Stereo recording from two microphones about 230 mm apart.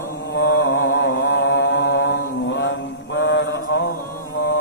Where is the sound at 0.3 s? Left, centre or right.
Left.